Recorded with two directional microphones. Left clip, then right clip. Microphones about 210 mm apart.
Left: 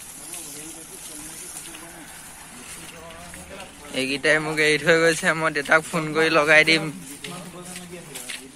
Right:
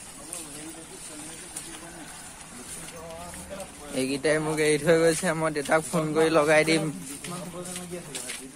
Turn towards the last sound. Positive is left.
turn(degrees=-10)  # may be behind; listen again after turning